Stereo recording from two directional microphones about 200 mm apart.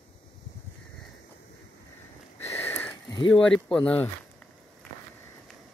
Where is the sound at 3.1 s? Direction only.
25° left (ahead or behind).